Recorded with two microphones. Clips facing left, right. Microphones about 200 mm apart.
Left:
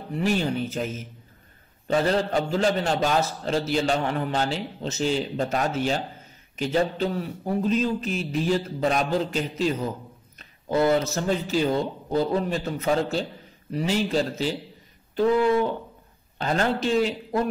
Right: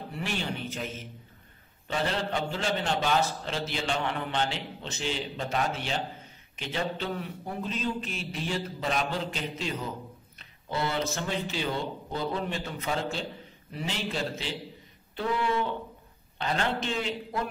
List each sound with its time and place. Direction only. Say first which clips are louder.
0.1 s a man's voice: left 10 dB; 40° left (ahead or behind)
16.3 s a man's voice: left 5 dB; 40° left (ahead or behind)